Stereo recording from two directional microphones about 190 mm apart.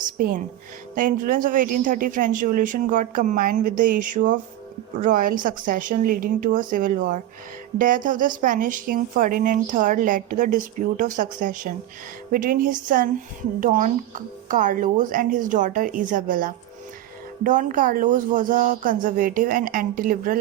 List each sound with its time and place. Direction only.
0.0 s music: 45° right (ahead or behind)
0.9 s speech: 45° right (ahead or behind)